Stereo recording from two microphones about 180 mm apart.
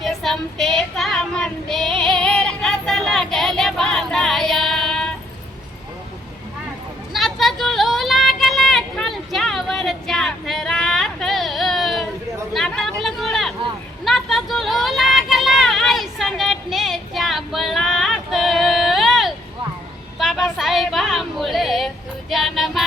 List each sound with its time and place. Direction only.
0.0 s child singing: centre (ahead or behind)
7.1 s a sound: centre (ahead or behind)
22.3 s music: centre (ahead or behind)